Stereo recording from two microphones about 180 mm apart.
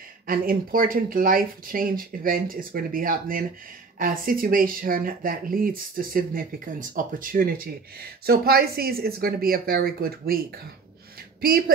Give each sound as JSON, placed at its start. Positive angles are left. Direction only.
{"t": 0.3, "sound": "speech", "side_deg": -55}